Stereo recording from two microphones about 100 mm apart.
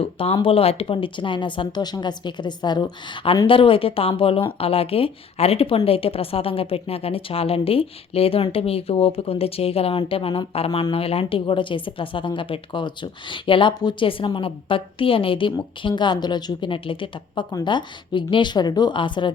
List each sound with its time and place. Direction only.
0.0 s speech: 70° left (ahead or behind); by 2.9 s 45° left (ahead or behind)
3.4 s speech: 60° left (ahead or behind)
17.5 s speech: 50° left (ahead or behind)